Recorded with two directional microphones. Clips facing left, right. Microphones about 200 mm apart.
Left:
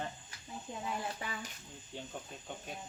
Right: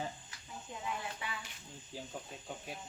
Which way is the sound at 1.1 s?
40° left (ahead or behind).